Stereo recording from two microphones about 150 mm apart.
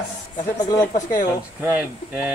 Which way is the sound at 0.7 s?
25° left (ahead or behind).